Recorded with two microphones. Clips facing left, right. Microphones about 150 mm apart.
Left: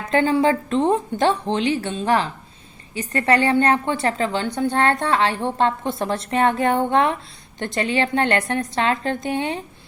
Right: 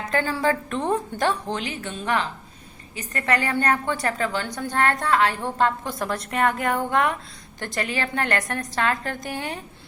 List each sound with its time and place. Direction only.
0.1 s a woman's voice: 20° left (ahead or behind)